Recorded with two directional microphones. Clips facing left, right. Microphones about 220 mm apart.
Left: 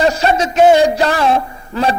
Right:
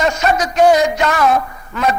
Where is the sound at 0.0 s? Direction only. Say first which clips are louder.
Left 2 dB; 30° left (ahead or behind).